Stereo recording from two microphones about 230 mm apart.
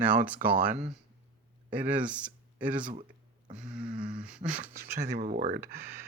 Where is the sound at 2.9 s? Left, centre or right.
Right.